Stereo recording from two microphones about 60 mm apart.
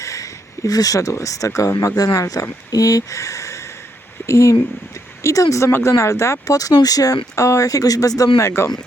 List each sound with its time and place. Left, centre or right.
0.0 s speech: left
6.4 s speech: left
8.4 s speech: left